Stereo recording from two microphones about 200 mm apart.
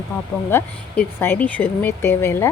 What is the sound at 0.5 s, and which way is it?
Speech, 10° left (ahead or behind).